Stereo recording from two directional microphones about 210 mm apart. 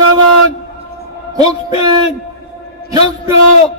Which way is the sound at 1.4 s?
15° right (ahead or behind).